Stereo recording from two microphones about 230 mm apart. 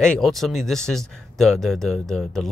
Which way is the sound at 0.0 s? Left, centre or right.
Centre.